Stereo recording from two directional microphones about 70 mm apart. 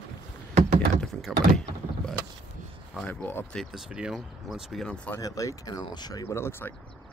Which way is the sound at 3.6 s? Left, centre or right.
Centre.